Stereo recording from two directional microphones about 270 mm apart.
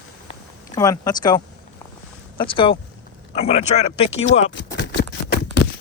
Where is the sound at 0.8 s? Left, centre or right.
Centre.